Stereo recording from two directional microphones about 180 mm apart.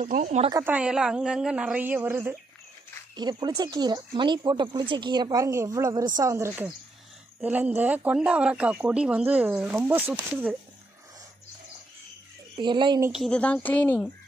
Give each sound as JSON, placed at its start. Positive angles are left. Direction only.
{"t": 0.0, "sound": "speech", "side_deg": -40}
{"t": 0.5, "sound": "speech", "side_deg": -15}
{"t": 0.7, "sound": "a woman's voice", "side_deg": -5}
{"t": 3.2, "sound": "speech", "side_deg": -25}
{"t": 12.5, "sound": "speech", "side_deg": -25}
{"t": 13.1, "sound": "speech", "side_deg": 5}